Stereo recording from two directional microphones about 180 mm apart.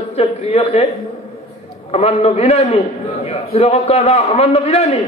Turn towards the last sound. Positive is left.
turn(degrees=35)  # may be behind; listen again after turning